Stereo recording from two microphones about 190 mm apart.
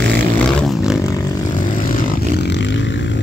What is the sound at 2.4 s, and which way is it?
Vehicle, 70° left (ahead or behind).